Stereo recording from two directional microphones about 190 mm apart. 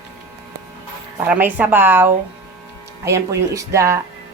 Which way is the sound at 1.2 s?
10° right (ahead or behind).